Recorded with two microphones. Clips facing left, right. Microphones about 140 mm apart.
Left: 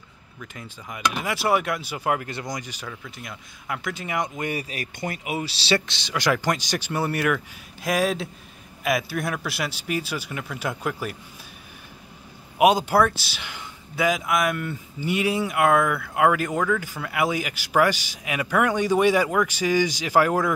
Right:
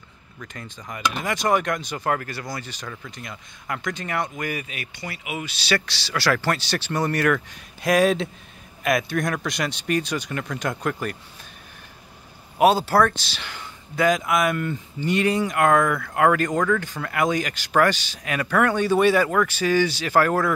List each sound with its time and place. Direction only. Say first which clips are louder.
0.4 s speech: right 1 dB; 5° left (ahead or behind)
4.4 s speech: left 1 dB; 30° left (ahead or behind); by 11.1 s 5° left (ahead or behind)
12.5 s speech: right 1 dB; 15° left (ahead or behind)